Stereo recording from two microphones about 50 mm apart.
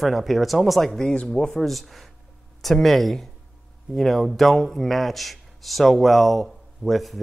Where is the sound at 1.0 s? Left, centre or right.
Centre.